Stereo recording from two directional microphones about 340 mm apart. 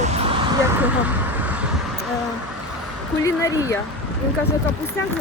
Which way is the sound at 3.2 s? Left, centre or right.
Centre.